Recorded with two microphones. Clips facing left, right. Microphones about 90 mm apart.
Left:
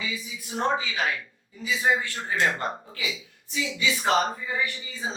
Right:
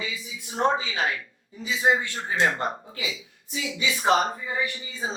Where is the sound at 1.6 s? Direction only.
25° right (ahead or behind).